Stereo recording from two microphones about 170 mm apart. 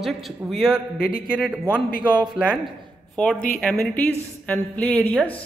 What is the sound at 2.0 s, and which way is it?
Speech, 25° right (ahead or behind).